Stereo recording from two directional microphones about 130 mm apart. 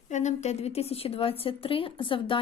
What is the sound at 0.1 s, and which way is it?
A woman's voice, 65° left (ahead or behind).